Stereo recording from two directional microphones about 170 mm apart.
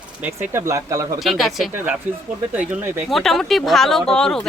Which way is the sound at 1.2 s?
Centre (ahead or behind).